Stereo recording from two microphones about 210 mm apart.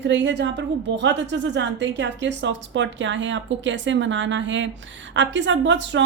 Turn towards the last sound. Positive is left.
turn(degrees=-60)  # may be behind; listen again after turning